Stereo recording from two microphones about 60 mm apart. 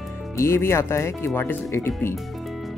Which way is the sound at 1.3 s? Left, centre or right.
Left.